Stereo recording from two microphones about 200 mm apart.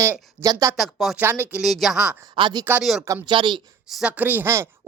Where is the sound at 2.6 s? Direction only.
5° right (ahead or behind).